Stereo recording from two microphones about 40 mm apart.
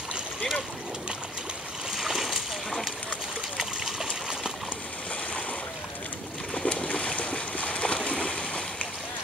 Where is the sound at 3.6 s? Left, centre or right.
Centre.